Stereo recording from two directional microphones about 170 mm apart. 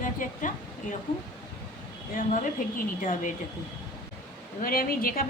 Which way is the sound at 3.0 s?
50° left (ahead or behind).